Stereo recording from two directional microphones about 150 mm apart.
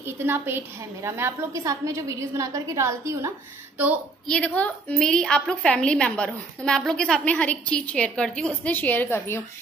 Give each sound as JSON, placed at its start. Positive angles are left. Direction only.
{"t": 0.0, "sound": "a woman's voice", "side_deg": -15}
{"t": 4.3, "sound": "a woman's voice", "side_deg": 10}